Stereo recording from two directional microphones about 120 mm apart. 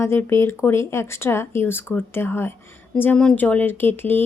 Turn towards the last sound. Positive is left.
turn(degrees=15)  # may be behind; listen again after turning